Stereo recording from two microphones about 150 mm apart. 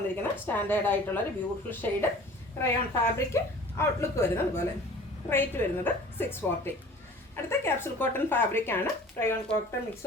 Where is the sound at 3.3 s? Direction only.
20° left (ahead or behind).